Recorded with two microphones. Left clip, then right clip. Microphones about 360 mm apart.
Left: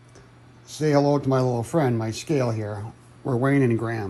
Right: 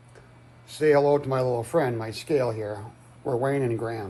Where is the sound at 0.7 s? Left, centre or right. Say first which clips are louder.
Right 1 dB; centre.